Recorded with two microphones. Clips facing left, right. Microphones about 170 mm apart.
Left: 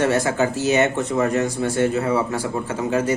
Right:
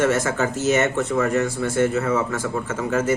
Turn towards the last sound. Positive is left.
turn(degrees=15)  # may be behind; listen again after turning